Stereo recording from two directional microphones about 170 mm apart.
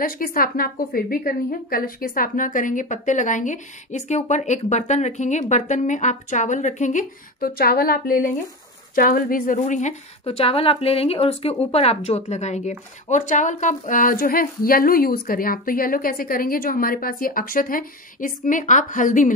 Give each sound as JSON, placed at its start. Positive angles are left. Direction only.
{"t": 0.0, "sound": "a woman's voice", "side_deg": 60}